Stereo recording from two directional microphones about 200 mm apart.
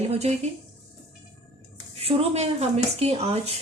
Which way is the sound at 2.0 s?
30° right (ahead or behind).